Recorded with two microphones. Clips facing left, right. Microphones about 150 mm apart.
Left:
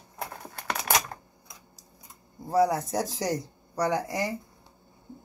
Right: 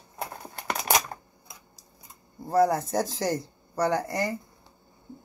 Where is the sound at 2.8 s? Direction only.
15° left (ahead or behind).